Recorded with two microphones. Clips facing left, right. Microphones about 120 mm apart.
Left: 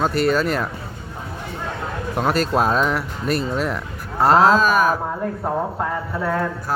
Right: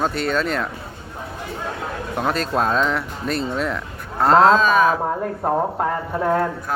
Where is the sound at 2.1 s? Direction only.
5° left (ahead or behind).